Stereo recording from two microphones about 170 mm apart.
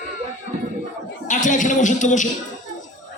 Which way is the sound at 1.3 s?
50° left (ahead or behind).